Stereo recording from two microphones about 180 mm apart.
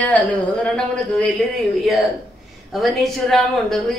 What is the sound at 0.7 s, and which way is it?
Speech, 5° left (ahead or behind).